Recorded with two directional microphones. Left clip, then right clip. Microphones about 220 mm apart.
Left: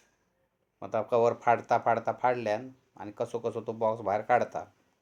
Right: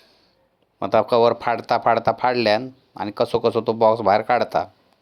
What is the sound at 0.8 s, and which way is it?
Speech, 35° right (ahead or behind).